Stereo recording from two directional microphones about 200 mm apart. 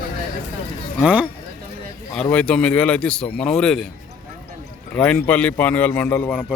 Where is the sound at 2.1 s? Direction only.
10° left (ahead or behind).